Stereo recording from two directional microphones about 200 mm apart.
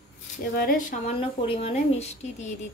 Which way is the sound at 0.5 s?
45° left (ahead or behind).